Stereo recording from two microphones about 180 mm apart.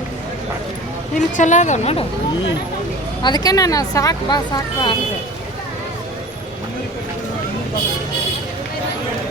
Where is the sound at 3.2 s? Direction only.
20° left (ahead or behind).